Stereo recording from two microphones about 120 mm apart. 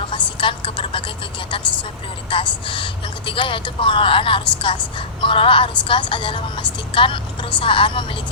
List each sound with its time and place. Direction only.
0.1 s vehicle: 45° left (ahead or behind)
2.3 s a woman's voice: 45° left (ahead or behind)